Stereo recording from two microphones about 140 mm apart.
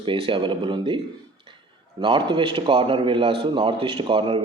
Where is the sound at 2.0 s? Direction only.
35° right (ahead or behind).